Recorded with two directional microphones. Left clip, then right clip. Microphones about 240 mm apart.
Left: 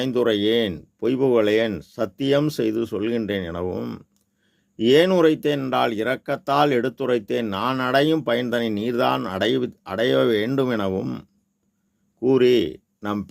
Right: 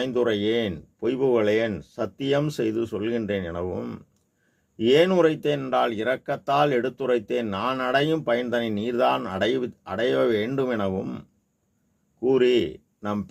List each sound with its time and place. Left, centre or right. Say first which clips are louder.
0.0 s speech: left 3 dB; left